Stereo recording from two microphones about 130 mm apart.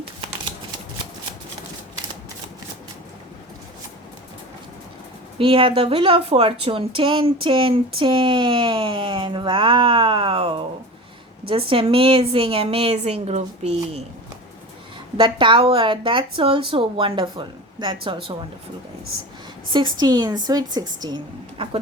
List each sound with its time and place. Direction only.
5.4 s a woman's voice: 45° right (ahead or behind)
15.2 s speech: 40° right (ahead or behind)
19.7 s speech: 35° right (ahead or behind)